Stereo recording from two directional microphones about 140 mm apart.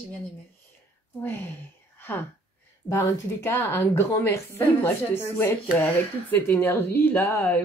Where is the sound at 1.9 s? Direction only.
15° left (ahead or behind).